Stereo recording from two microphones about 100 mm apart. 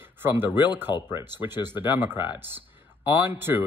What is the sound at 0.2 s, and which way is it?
Speech, 20° right (ahead or behind).